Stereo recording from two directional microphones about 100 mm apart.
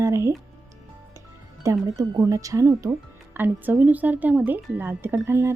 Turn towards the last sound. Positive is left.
turn(degrees=-25)  # may be behind; listen again after turning